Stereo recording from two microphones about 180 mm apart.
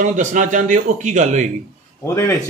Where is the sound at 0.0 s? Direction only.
40° right (ahead or behind).